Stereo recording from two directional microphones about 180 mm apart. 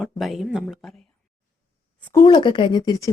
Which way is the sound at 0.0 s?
Centre (ahead or behind).